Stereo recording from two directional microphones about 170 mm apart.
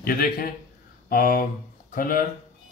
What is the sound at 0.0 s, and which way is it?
A man's voice, 60° left (ahead or behind).